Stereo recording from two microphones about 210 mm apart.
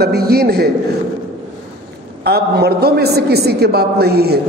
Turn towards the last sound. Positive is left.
turn(degrees=-50)  # may be behind; listen again after turning